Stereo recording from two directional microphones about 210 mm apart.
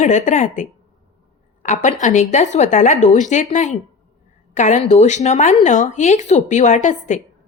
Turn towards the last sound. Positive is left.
turn(degrees=35)  # may be behind; listen again after turning